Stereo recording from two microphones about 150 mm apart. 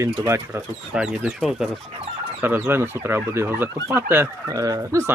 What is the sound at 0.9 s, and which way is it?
Speech, 5° right (ahead or behind).